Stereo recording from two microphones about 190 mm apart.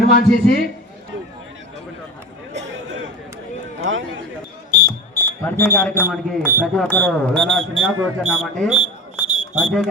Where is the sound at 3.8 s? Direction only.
90° right.